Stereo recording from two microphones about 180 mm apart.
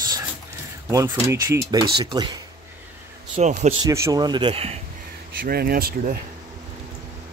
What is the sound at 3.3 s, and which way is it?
Speech, 40° right (ahead or behind).